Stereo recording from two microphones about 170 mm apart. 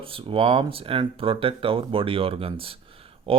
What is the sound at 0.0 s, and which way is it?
Speech, 30° right (ahead or behind).